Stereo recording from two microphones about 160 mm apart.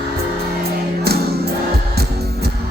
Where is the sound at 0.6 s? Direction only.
80° right.